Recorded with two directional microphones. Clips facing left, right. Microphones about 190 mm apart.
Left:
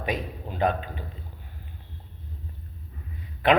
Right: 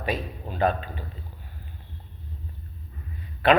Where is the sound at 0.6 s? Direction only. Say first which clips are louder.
Right 1 dB; 15° left (ahead or behind).